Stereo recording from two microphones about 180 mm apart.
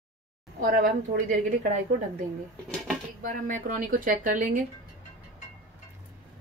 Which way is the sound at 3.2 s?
50° right (ahead or behind).